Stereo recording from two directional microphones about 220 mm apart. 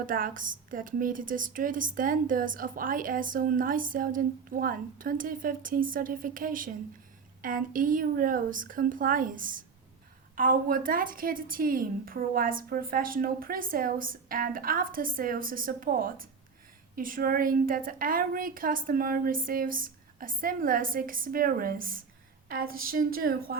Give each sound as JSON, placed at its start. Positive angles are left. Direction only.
{"t": 0.0, "sound": "speech", "side_deg": -40}